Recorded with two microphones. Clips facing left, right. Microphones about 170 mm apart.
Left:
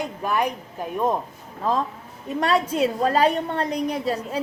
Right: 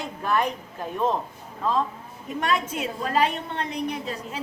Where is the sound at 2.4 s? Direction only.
35° left (ahead or behind).